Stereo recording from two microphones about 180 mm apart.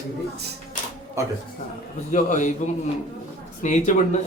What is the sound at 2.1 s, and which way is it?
Speech, 45° left (ahead or behind).